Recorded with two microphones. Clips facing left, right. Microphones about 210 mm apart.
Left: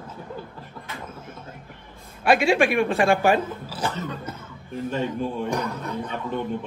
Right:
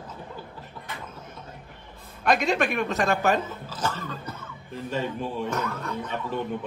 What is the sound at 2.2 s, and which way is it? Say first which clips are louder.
Speech: left 4 dB; 10° left (ahead or behind).